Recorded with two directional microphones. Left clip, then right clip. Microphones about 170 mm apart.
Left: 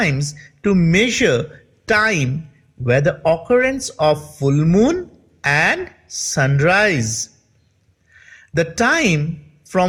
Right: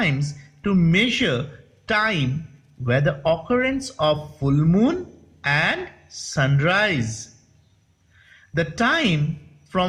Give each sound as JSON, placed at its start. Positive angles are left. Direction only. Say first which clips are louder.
{"t": 0.0, "sound": "a woman's voice", "louder": "left 4 dB", "side_deg": 40}
{"t": 8.5, "sound": "speech", "louder": "left 4 dB", "side_deg": 45}